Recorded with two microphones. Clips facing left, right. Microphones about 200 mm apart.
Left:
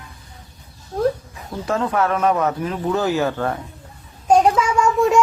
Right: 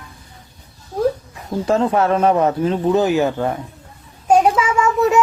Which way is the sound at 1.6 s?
25° right (ahead or behind).